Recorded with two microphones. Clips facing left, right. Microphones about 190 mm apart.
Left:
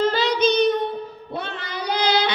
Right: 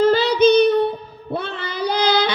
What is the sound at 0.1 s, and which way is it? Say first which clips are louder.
Child singing: right 6 dB; 55° right (ahead or behind).